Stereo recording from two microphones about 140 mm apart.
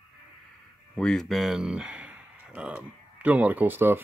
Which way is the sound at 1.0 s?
5° left (ahead or behind).